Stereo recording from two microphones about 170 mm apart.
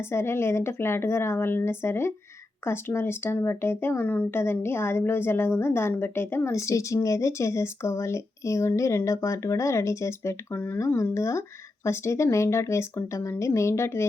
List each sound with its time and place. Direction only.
0.0 s speech: 15° left (ahead or behind)